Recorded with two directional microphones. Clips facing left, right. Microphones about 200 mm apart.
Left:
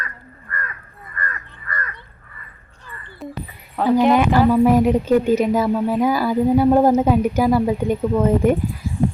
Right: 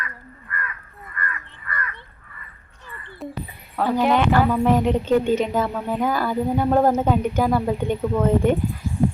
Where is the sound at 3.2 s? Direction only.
Centre (ahead or behind).